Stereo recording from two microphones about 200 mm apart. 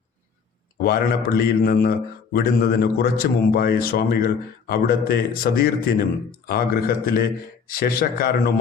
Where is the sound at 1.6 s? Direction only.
50° left (ahead or behind).